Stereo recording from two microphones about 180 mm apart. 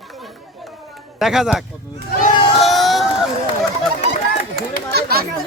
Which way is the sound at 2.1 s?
45° left (ahead or behind).